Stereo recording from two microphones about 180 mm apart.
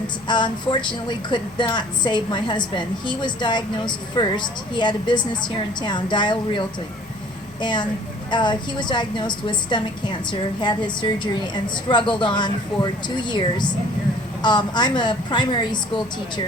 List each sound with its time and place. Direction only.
0.3 s a woman's voice: 25° left (ahead or behind)